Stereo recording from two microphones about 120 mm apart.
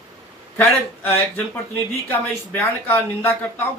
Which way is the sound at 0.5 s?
15° left (ahead or behind).